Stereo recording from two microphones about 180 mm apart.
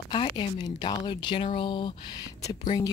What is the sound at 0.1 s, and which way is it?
Speech, 25° left (ahead or behind).